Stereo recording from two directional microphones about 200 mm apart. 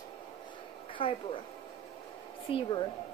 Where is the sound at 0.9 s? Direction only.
25° left (ahead or behind).